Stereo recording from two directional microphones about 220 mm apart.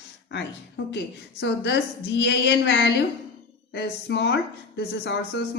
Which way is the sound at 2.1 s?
55° left (ahead or behind).